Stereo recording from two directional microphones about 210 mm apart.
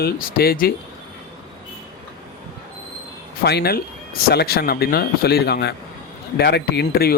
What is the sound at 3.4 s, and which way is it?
A man's voice, 50° left (ahead or behind).